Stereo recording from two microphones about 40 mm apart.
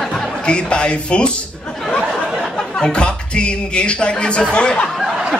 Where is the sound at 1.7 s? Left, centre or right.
Centre.